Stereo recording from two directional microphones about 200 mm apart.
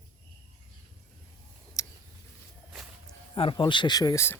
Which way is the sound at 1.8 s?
15° left (ahead or behind).